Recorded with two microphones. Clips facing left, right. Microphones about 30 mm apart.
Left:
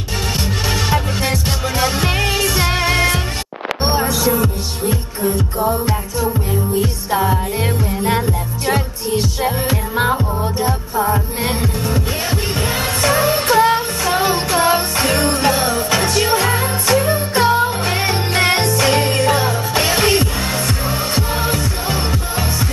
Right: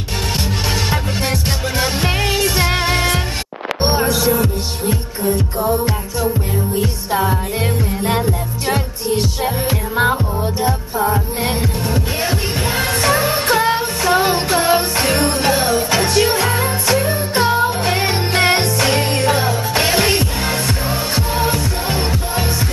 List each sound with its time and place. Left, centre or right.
0.8 s music: centre
1.8 s music: centre
4.3 s music: centre
7.2 s music: centre
12.5 s music: centre
17.5 s music: right; by 19.4 s centre
19.5 s music: centre